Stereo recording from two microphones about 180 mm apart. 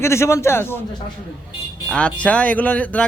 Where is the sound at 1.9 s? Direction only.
5° left (ahead or behind).